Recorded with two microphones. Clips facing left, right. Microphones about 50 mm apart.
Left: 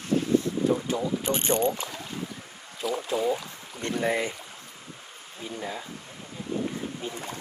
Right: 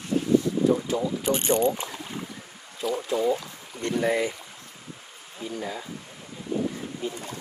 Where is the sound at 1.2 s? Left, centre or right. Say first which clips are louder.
Right 4 dB; left.